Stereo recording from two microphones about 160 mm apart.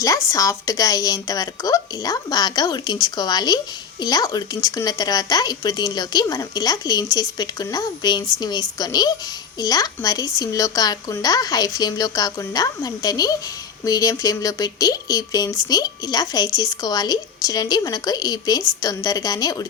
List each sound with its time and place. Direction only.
0.0 s speech: 20° left (ahead or behind)